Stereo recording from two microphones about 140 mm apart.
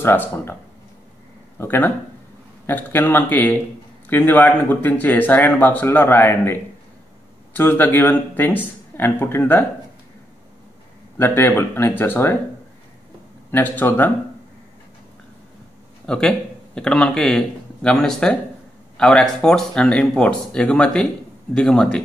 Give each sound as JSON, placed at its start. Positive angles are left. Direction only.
{"t": 0.0, "sound": "speech", "side_deg": 15}
{"t": 1.6, "sound": "speech", "side_deg": 15}
{"t": 11.1, "sound": "speech", "side_deg": 15}
{"t": 13.5, "sound": "speech", "side_deg": 15}
{"t": 16.1, "sound": "a man's voice", "side_deg": 5}